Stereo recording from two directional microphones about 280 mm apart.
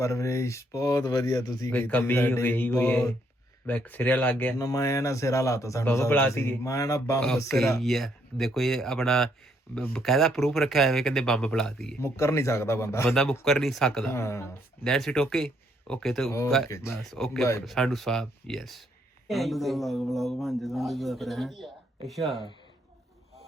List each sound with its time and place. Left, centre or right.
0.0 s speech: centre